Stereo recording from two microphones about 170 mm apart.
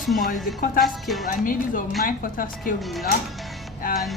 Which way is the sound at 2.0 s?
55° left (ahead or behind).